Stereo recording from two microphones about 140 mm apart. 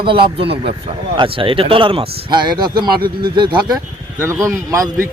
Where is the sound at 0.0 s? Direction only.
40° right (ahead or behind).